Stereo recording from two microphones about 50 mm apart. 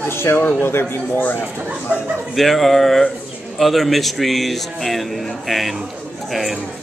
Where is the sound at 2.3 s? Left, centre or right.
Centre.